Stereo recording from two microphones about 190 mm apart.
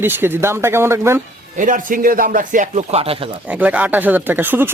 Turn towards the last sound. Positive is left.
turn(degrees=-10)  # may be behind; listen again after turning